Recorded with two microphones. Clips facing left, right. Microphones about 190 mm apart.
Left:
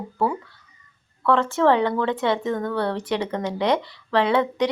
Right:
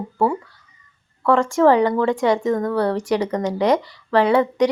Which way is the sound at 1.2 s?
10° right (ahead or behind).